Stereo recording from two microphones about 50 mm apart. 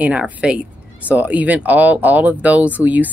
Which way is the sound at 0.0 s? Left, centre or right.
Right.